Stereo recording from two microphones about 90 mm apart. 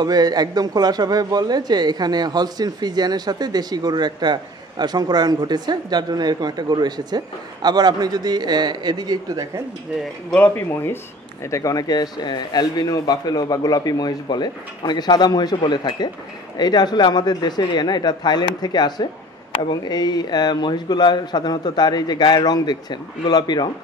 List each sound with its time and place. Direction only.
0.0 s a man's voice: 50° right (ahead or behind)
10.5 s speech: 25° left (ahead or behind)
11.4 s speech: 35° left (ahead or behind); by 23.7 s 55° left (ahead or behind)